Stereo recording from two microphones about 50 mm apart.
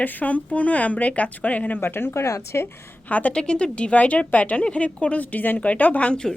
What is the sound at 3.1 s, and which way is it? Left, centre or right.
Speech, left.